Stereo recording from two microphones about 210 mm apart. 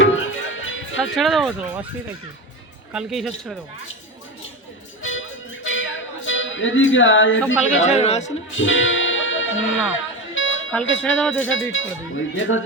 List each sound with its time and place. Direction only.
0.0 s music: 65° left (ahead or behind)
1.1 s speech: centre (ahead or behind)
2.9 s speech: 5° right (ahead or behind)
5.0 s music: 65° left (ahead or behind)
7.9 s a man's voice: 30° left (ahead or behind)
8.5 s speech: 65° left (ahead or behind)
10.3 s music: 65° left (ahead or behind)
11.0 s speech: 5° left (ahead or behind)
11.4 s speech: 70° left (ahead or behind)